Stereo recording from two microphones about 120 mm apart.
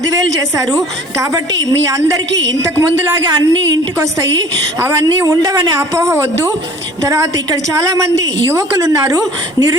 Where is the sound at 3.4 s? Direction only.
30° right (ahead or behind).